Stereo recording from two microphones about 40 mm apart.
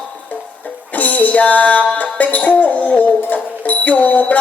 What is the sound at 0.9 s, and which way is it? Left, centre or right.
Music, left.